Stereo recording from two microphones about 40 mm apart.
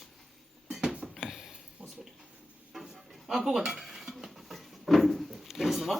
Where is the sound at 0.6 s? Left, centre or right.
Centre.